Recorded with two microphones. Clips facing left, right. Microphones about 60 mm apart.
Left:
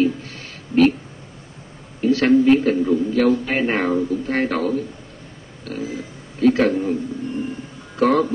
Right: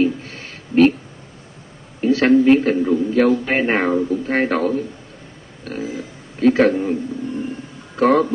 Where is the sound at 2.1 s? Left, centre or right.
Centre.